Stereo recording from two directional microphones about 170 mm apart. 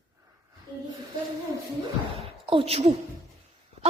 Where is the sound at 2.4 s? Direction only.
35° right (ahead or behind).